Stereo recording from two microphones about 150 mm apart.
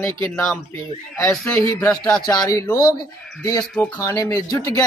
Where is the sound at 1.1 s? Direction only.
20° left (ahead or behind).